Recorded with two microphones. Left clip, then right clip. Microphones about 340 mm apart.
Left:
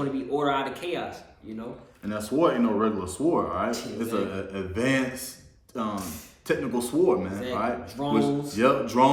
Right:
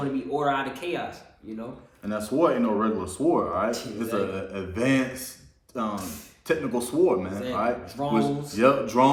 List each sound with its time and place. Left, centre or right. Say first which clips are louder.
0.3 s speech: even; centre